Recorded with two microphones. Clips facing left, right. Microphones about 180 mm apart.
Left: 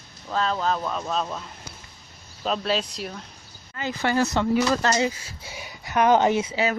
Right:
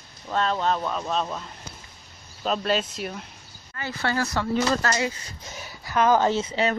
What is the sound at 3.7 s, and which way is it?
Speech, 15° left (ahead or behind).